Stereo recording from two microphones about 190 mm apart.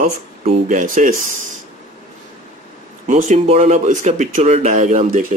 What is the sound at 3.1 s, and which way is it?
Speech, 35° right (ahead or behind).